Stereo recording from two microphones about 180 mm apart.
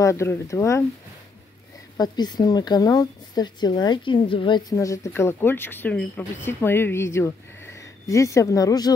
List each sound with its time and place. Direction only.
0.0 s speech: 15° left (ahead or behind)
2.0 s speech: 25° left (ahead or behind)